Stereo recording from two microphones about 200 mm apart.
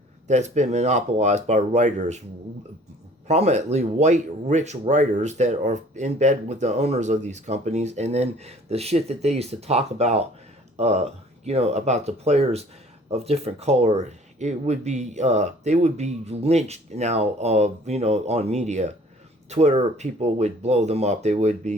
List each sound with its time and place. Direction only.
0.3 s speech: 35° right (ahead or behind)
3.2 s speech: 35° right (ahead or behind)